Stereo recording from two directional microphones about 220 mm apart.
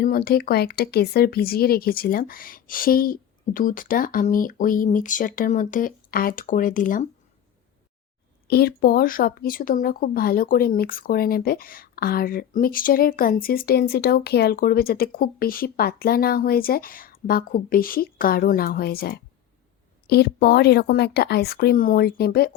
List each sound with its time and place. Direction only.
0.0 s speech: 40° left (ahead or behind)
8.4 s speech: 45° left (ahead or behind)